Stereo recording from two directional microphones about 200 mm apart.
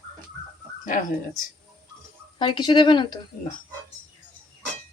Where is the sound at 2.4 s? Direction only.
20° left (ahead or behind).